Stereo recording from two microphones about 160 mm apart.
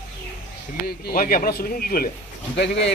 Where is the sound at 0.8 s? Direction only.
65° left (ahead or behind).